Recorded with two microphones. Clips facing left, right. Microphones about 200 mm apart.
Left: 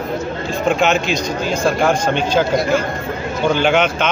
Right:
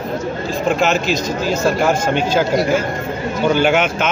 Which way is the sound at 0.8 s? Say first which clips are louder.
Even; centre (ahead or behind).